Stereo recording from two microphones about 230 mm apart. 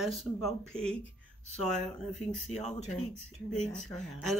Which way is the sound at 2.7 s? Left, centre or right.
Left.